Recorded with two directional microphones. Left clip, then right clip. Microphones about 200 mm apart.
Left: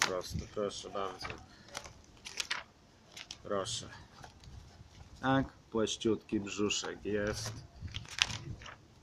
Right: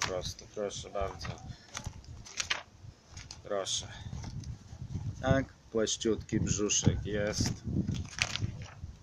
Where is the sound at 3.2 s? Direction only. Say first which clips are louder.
Right 1 dB; 10° right (ahead or behind).